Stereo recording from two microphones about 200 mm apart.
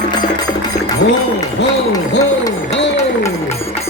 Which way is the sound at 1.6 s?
60° left (ahead or behind).